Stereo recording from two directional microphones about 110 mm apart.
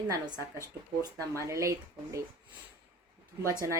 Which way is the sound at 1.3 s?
30° right (ahead or behind).